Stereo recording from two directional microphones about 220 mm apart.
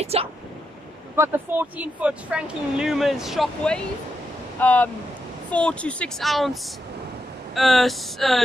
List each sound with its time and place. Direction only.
0.0 s speech: 25° right (ahead or behind)
1.1 s speech: 10° right (ahead or behind)